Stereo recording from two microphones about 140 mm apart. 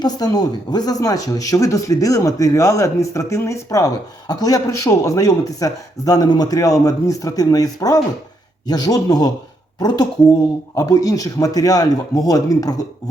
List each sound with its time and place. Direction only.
0.0 s speech: 25° left (ahead or behind)